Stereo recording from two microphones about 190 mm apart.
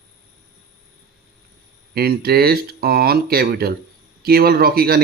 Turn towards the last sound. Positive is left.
turn(degrees=-50)  # may be behind; listen again after turning